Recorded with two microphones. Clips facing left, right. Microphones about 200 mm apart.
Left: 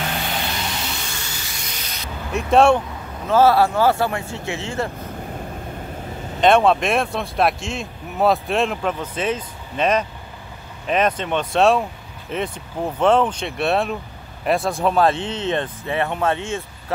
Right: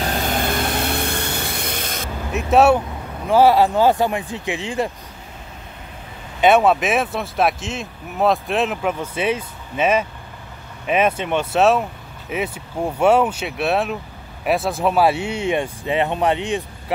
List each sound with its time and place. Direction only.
0.0 s vehicle: 40° right (ahead or behind)
2.3 s speech: 5° right (ahead or behind)
6.4 s speech: 5° right (ahead or behind)